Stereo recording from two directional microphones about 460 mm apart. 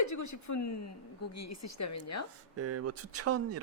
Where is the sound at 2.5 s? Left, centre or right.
Right.